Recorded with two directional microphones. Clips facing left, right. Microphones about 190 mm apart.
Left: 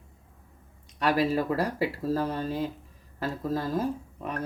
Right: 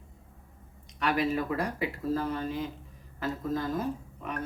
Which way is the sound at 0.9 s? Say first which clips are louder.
Left 3 dB; 35° left (ahead or behind).